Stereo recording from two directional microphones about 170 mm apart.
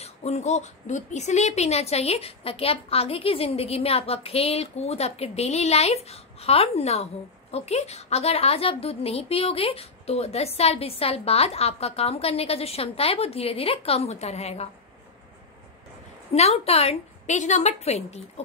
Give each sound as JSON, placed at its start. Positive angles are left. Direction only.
{"t": 0.0, "sound": "a woman's voice", "side_deg": 40}
{"t": 16.3, "sound": "a woman's voice", "side_deg": 35}